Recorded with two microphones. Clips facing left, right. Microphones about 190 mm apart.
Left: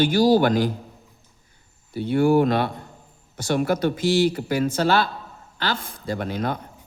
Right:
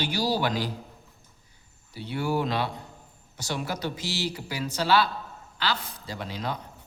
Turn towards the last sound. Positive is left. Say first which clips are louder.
# left 7 dB
turn(degrees=55)  # may be behind; listen again after turning